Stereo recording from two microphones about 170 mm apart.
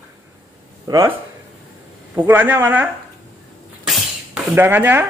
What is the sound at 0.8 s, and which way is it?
Speech, 25° right (ahead or behind).